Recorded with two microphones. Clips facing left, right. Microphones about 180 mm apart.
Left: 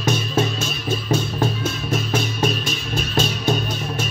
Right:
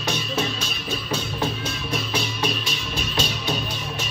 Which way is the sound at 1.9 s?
45° left (ahead or behind).